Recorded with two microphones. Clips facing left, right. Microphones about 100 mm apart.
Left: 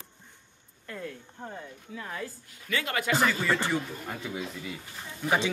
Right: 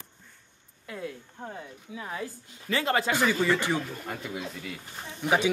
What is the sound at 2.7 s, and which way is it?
Speech, 30° right (ahead or behind).